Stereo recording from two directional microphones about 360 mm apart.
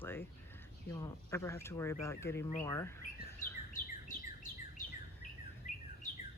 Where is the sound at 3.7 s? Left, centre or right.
Left.